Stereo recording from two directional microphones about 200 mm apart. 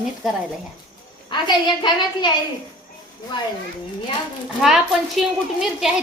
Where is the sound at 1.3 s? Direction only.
20° left (ahead or behind).